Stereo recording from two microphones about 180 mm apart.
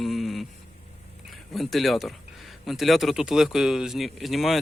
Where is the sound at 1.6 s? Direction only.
Centre (ahead or behind).